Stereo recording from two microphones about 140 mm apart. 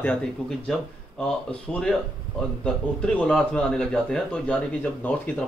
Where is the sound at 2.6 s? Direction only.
5° left (ahead or behind).